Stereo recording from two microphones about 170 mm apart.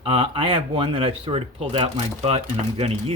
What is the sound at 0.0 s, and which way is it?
Speech, 35° right (ahead or behind).